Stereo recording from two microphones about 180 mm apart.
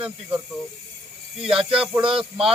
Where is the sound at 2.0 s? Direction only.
30° right (ahead or behind).